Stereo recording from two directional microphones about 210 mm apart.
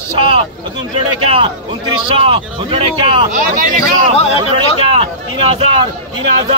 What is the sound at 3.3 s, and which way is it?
Speech, 40° right (ahead or behind).